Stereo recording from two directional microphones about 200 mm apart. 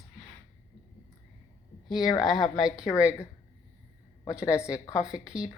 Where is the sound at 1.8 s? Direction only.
Centre (ahead or behind).